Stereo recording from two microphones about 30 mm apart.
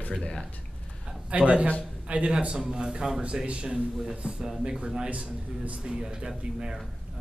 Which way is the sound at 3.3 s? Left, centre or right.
Right.